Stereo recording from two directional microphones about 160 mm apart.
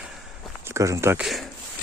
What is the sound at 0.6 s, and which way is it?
Speech, 20° right (ahead or behind).